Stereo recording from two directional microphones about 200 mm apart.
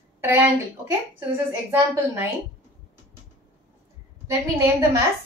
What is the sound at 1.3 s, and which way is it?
Speech, 10° right (ahead or behind).